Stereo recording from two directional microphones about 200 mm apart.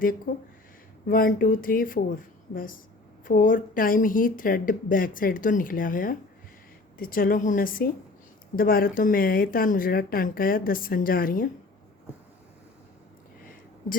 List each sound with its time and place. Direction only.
0.3 s speech: 40° left (ahead or behind)